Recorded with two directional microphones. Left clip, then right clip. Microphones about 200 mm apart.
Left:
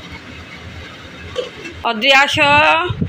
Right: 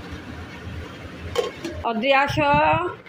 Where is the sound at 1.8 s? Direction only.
5° left (ahead or behind).